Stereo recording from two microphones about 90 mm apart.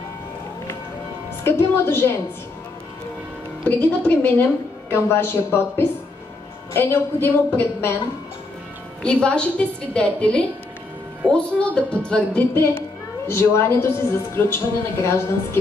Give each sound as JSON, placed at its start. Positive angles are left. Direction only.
{"t": 1.4, "sound": "a woman's voice", "side_deg": 25}
{"t": 3.6, "sound": "a woman's voice", "side_deg": 20}
{"t": 9.0, "sound": "a woman's voice", "side_deg": 10}
{"t": 13.3, "sound": "a woman's voice", "side_deg": 30}